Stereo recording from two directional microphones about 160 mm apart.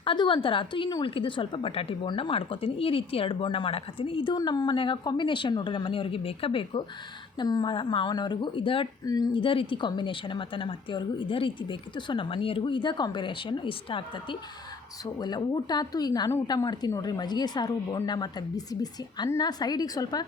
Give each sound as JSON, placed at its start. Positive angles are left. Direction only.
{"t": 0.0, "sound": "a woman's voice", "side_deg": 30}